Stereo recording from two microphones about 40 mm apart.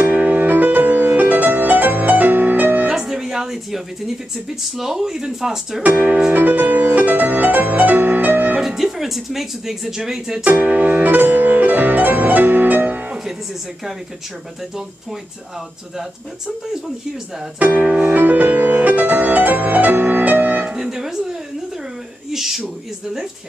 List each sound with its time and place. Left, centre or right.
0.0 s music: right
2.9 s music: centre
4.7 s speech: centre
5.9 s music: right
8.5 s speech: centre
10.4 s speech: right
11.1 s music: right
17.6 s music: right
20.7 s music: centre
22.3 s a sound: centre